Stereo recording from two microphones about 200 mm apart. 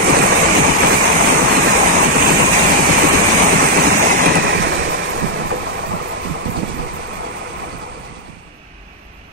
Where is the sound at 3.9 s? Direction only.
40° right (ahead or behind).